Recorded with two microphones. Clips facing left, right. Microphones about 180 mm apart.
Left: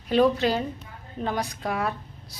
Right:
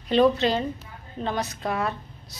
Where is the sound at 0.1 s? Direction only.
10° left (ahead or behind).